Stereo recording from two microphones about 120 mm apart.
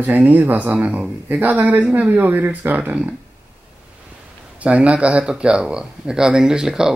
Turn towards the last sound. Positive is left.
turn(degrees=-5)  # may be behind; listen again after turning